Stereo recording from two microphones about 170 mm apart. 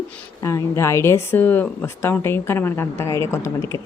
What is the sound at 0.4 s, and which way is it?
Speech, 15° left (ahead or behind).